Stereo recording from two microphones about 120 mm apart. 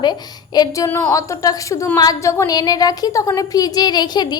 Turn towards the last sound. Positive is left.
turn(degrees=35)  # may be behind; listen again after turning